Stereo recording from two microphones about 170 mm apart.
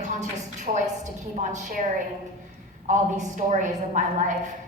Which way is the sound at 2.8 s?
45° right (ahead or behind).